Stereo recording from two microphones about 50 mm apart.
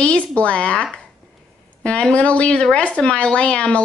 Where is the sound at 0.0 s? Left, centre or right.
Left.